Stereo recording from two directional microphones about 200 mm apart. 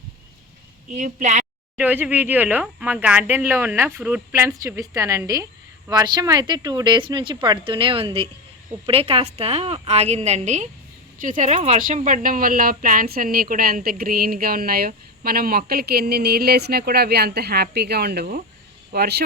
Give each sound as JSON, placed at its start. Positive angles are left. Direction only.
{"t": 0.9, "sound": "a woman's voice", "side_deg": -35}
{"t": 1.7, "sound": "a woman's voice", "side_deg": -10}